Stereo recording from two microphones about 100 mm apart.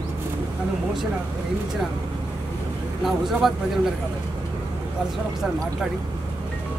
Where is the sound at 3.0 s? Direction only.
5° right (ahead or behind).